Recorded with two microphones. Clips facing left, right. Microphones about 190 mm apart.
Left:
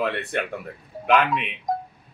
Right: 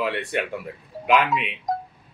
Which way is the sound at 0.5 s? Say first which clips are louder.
Right 1 dB; 5° right (ahead or behind).